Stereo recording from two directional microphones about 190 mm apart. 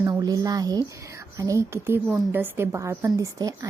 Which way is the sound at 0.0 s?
20° right (ahead or behind).